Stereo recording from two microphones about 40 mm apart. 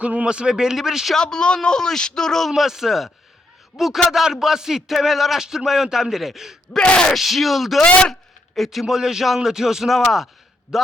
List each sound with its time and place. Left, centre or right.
0.0 s a man's voice: right
0.3 s speech: right
1.1 s speech: centre
2.5 s speech: centre
6.7 s speech: left
7.1 s speech: centre
7.8 s speech: left
8.5 s speech: centre